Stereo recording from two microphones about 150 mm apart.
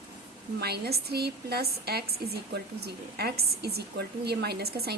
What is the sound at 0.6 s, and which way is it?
A woman's voice, 90° right.